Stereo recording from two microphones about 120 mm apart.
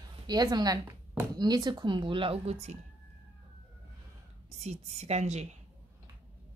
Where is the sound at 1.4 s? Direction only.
35° right (ahead or behind); by 2.8 s 60° right (ahead or behind).